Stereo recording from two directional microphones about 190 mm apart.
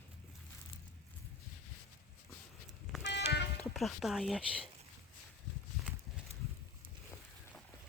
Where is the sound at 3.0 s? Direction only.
65° left (ahead or behind).